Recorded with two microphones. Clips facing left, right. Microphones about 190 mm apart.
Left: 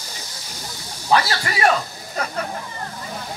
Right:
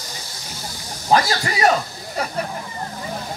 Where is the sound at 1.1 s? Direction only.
40° right (ahead or behind).